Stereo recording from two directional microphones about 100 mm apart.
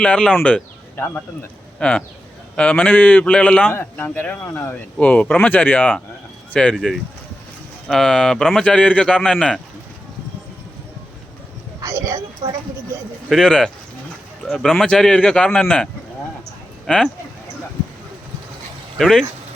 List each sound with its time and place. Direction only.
0.0 s a man's voice: 10° left (ahead or behind)
0.9 s speech: 25° left (ahead or behind)
1.8 s a man's voice: 10° left (ahead or behind)
11.8 s a sound: 30° right (ahead or behind)
13.2 s a man's voice: 5° left (ahead or behind)
18.9 s speech: 5° left (ahead or behind)